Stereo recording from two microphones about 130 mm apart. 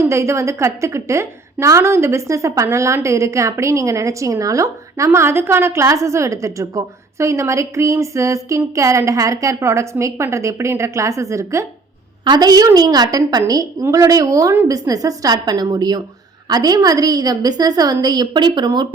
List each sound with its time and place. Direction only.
0.0 s a woman's voice: 20° right (ahead or behind)